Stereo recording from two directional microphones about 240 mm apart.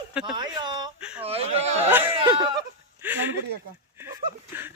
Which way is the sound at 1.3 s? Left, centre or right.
Right.